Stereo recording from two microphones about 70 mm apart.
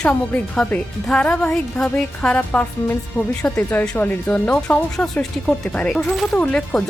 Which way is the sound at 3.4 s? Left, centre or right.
Centre.